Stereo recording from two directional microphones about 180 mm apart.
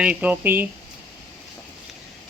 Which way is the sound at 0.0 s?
10° right (ahead or behind).